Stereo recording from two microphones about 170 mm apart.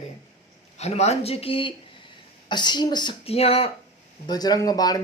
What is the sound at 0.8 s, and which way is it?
Speech, 40° left (ahead or behind).